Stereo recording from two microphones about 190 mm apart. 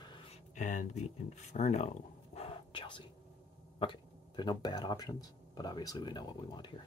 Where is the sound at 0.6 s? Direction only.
40° left (ahead or behind).